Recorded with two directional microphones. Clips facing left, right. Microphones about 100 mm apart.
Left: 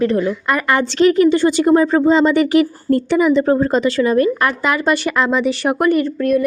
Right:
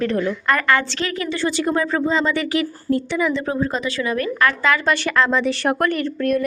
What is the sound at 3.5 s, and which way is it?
A woman's voice, 35° left (ahead or behind).